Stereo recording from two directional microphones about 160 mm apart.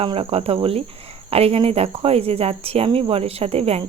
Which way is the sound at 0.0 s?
35° right (ahead or behind).